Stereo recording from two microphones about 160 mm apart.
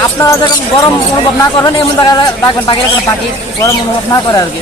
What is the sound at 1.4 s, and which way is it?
Speech, 20° left (ahead or behind).